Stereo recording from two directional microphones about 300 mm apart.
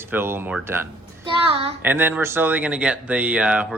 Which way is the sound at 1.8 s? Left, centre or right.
Centre.